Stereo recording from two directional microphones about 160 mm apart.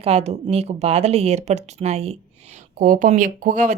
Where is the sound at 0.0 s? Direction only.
40° right (ahead or behind).